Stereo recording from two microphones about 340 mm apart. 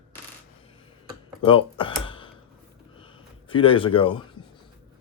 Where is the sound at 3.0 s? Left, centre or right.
Centre.